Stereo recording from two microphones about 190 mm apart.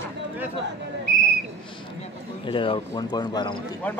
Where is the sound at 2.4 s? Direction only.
25° left (ahead or behind).